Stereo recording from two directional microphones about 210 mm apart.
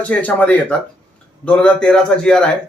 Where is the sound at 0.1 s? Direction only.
5° left (ahead or behind).